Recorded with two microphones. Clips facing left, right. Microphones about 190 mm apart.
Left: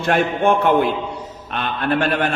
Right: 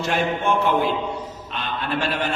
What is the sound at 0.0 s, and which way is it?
A man's voice, 55° left (ahead or behind).